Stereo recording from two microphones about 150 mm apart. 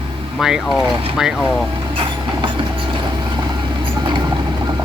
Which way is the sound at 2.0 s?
35° right (ahead or behind).